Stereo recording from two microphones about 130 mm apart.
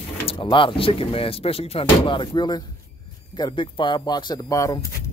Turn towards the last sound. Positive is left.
turn(degrees=25)  # may be behind; listen again after turning